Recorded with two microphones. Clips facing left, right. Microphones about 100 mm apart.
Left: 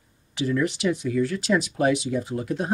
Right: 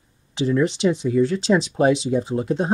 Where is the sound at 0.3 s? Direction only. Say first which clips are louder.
Right 4 dB; 25° right (ahead or behind).